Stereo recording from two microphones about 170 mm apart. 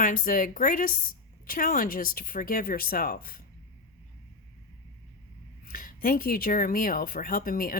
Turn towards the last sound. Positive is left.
turn(degrees=55)  # may be behind; listen again after turning